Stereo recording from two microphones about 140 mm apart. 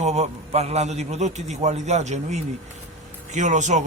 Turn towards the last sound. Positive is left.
turn(degrees=-60)  # may be behind; listen again after turning